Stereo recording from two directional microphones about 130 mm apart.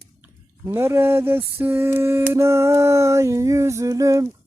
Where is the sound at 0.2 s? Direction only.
15° right (ahead or behind).